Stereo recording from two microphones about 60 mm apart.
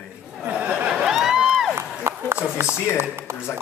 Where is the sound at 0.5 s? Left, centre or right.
Centre.